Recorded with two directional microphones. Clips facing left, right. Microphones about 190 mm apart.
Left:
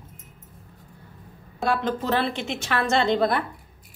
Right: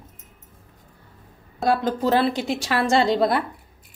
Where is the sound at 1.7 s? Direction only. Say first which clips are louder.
Right 4 dB; 35° right (ahead or behind).